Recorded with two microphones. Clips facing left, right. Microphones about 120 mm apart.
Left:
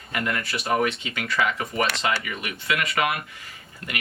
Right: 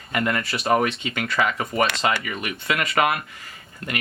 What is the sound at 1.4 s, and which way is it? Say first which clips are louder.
Speech: right 2 dB; 45° right (ahead or behind).